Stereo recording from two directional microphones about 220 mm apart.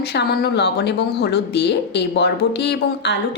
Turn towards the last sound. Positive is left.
turn(degrees=50)  # may be behind; listen again after turning